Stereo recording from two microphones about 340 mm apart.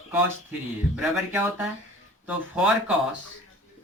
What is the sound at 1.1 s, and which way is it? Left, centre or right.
Speech, centre.